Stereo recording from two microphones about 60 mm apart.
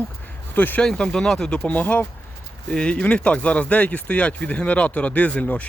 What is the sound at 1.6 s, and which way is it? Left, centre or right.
Speech, left.